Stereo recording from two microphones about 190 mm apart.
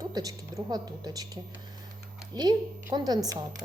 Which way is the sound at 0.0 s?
20° right (ahead or behind).